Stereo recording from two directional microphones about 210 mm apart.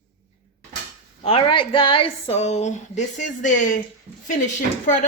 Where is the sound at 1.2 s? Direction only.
25° left (ahead or behind).